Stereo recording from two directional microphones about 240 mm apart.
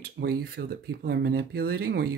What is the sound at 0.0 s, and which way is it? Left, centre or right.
Speech, right.